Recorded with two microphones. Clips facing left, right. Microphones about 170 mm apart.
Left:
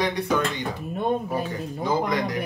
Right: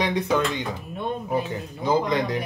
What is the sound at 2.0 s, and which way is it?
Speech, 20° right (ahead or behind).